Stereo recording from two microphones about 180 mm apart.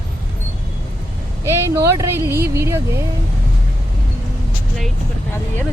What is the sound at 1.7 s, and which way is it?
Speech, 15° right (ahead or behind).